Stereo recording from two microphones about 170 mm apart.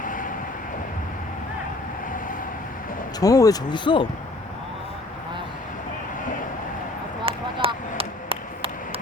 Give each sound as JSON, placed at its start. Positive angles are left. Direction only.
{"t": 0.0, "sound": "vehicle", "side_deg": 50}
{"t": 3.2, "sound": "speech", "side_deg": 20}
{"t": 7.3, "sound": "a sound", "side_deg": -30}